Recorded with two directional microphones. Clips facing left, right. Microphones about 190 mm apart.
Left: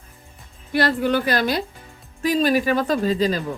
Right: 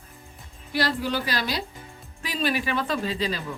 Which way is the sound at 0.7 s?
55° left (ahead or behind).